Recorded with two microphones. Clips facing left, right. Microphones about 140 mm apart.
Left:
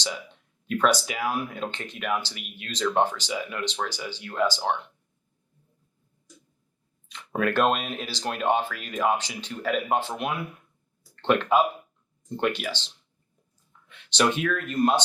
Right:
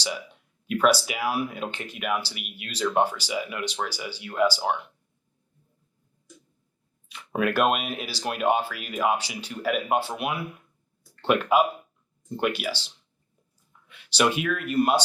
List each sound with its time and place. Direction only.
0.7 s speech: 10° right (ahead or behind)
7.1 s speech: 10° right (ahead or behind)